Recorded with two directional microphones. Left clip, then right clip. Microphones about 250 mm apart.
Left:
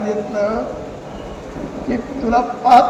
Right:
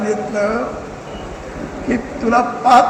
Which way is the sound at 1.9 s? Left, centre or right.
Right.